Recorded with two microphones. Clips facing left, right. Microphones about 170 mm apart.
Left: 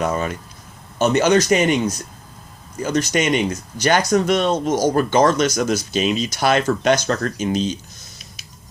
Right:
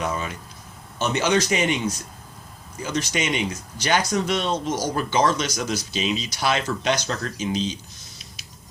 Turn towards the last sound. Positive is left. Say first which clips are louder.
# left 5 dB
turn(degrees=50)  # may be behind; listen again after turning